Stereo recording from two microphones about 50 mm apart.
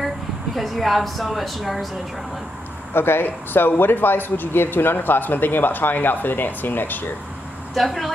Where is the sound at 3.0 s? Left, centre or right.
Left.